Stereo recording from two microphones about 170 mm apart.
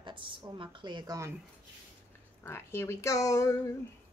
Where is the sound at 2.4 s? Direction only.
15° left (ahead or behind).